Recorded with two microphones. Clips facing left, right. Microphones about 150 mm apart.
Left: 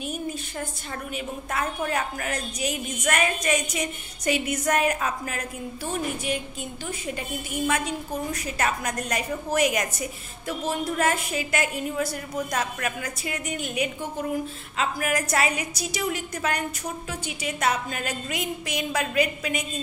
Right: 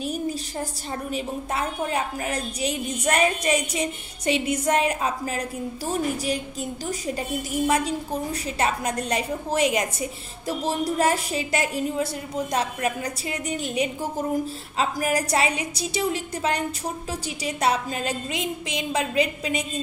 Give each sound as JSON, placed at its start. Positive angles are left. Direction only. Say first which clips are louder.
{"t": 0.0, "sound": "a woman's voice", "louder": "right 4 dB", "side_deg": -35}